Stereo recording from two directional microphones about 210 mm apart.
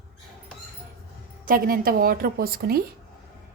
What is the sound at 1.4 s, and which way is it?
A woman's voice, 40° right (ahead or behind).